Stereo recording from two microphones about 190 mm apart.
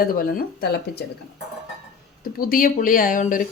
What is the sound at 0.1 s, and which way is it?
Speech, 50° left (ahead or behind).